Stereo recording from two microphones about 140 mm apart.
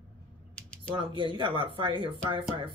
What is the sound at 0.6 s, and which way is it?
Typing, 10° left (ahead or behind).